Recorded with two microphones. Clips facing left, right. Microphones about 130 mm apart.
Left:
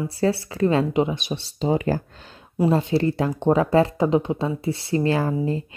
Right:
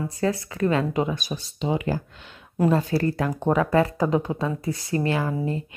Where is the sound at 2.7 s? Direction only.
25° left (ahead or behind).